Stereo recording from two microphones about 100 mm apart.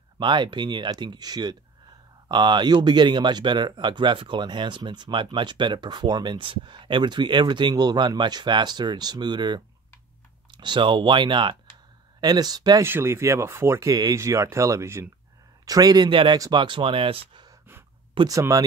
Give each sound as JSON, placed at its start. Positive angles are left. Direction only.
{"t": 0.2, "sound": "speech", "side_deg": -50}
{"t": 12.8, "sound": "speech", "side_deg": -25}
{"t": 16.1, "sound": "speech", "side_deg": -55}
{"t": 16.3, "sound": "speech", "side_deg": -40}
{"t": 16.6, "sound": "speech", "side_deg": -55}
{"t": 18.3, "sound": "speech", "side_deg": -35}